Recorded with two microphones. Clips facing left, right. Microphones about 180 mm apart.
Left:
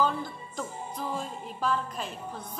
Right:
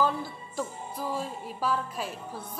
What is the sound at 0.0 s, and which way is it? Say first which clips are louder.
Music: even; 5° right (ahead or behind).